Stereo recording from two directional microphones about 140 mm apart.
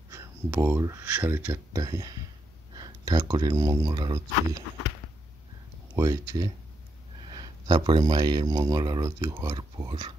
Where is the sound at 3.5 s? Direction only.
20° right (ahead or behind).